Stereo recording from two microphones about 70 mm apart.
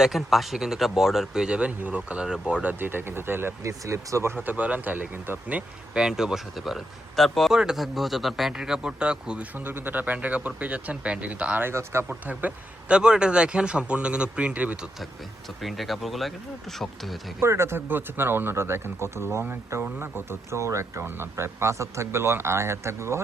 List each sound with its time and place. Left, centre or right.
0.0 s a man's voice: centre
2.8 s speech: right
3.6 s speech: right
4.4 s speech: right
5.5 s a man's voice: centre
7.5 s a man's voice: centre
9.6 s speech: right
11.6 s speech: right
12.0 s a man's voice: right
15.6 s speech: centre
17.4 s speech: right